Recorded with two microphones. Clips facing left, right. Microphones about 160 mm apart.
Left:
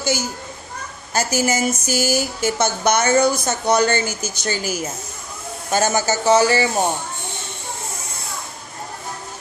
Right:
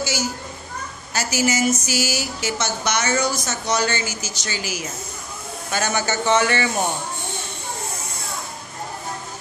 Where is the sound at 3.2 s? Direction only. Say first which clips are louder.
Left 6 dB; 55° left (ahead or behind); by 6.7 s 30° left (ahead or behind).